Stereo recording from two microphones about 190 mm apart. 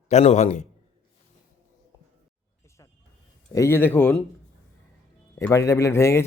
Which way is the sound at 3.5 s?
15° left (ahead or behind).